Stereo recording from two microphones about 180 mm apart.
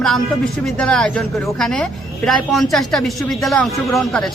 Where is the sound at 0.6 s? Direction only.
5° left (ahead or behind).